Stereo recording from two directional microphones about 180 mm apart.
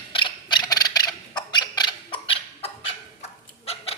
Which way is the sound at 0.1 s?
30° left (ahead or behind).